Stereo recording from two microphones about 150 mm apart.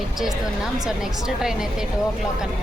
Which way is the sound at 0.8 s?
5° right (ahead or behind).